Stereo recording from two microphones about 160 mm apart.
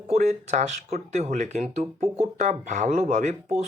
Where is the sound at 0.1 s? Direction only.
45° right (ahead or behind).